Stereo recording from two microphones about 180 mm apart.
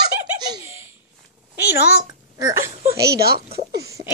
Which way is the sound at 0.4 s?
20° right (ahead or behind).